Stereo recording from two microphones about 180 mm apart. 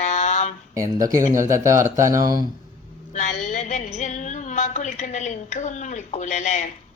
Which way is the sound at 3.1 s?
40° left (ahead or behind).